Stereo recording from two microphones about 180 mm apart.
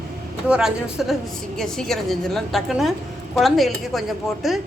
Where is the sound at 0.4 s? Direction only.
5° right (ahead or behind).